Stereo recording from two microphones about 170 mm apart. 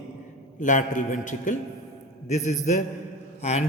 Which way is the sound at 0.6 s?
50° left (ahead or behind).